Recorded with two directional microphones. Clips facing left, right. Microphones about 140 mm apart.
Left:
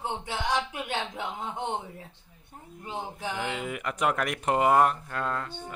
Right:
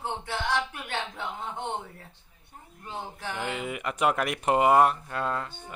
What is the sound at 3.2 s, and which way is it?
Speech, 10° left (ahead or behind).